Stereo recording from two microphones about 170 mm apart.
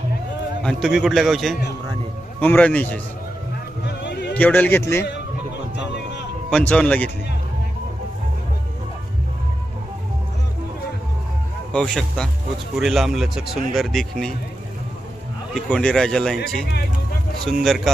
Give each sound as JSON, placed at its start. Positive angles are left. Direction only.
{"t": 0.6, "sound": "speech", "side_deg": 0}
{"t": 3.8, "sound": "a sound", "side_deg": 75}
{"t": 4.4, "sound": "speech", "side_deg": 10}
{"t": 6.5, "sound": "speech", "side_deg": 5}
{"t": 11.7, "sound": "speech", "side_deg": 5}
{"t": 15.5, "sound": "speech", "side_deg": 5}
{"t": 17.6, "sound": "speech", "side_deg": 0}